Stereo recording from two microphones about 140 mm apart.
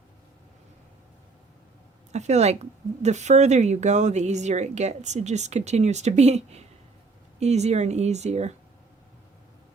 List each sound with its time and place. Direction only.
2.1 s speech: 55° right (ahead or behind)